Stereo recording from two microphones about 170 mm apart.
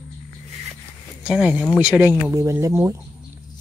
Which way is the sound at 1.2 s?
5° right (ahead or behind).